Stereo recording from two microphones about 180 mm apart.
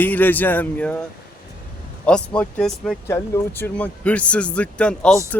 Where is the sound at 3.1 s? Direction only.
15° left (ahead or behind).